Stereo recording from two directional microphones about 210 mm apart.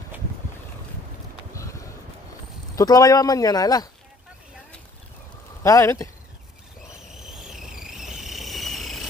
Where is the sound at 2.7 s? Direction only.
15° left (ahead or behind).